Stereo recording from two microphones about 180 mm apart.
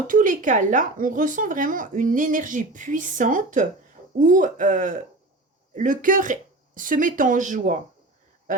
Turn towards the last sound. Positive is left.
turn(degrees=-45)  # may be behind; listen again after turning